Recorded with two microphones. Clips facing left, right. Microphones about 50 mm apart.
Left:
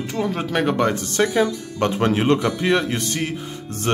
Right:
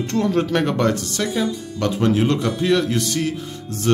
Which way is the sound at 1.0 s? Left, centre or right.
Left.